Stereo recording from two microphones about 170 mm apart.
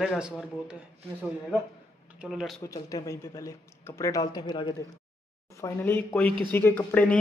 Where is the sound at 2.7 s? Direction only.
20° left (ahead or behind).